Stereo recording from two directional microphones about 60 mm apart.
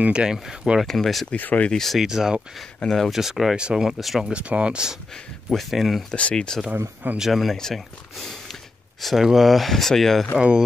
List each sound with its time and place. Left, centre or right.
0.0 s speech: centre
0.8 s speech: centre
1.3 s speech: left
1.7 s speech: centre
2.0 s speech: centre
4.3 s speech: centre
5.1 s speech: centre
6.1 s speech: centre
7.2 s speech: centre